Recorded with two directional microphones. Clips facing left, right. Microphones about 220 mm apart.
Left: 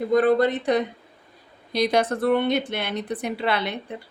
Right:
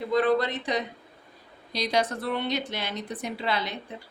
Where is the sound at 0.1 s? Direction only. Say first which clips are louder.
Left 5 dB; 50° left (ahead or behind).